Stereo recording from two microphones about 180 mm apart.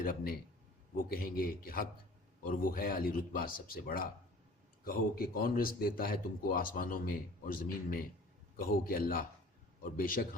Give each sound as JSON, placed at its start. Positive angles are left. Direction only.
{"t": 0.0, "sound": "a man's voice", "side_deg": 55}